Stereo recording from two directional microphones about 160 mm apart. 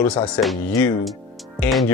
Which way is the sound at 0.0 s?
10° left (ahead or behind).